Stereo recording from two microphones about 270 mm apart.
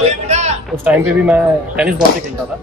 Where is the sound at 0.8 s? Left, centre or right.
Centre.